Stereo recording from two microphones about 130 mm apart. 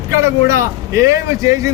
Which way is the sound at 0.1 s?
20° right (ahead or behind).